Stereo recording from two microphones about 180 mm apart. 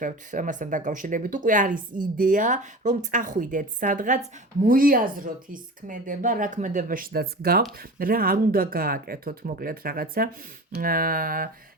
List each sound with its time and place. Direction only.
0.0 s speech: 45° right (ahead or behind)